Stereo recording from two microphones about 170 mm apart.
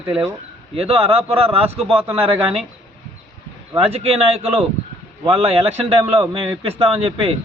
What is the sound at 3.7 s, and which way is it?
A man's voice, 35° right (ahead or behind).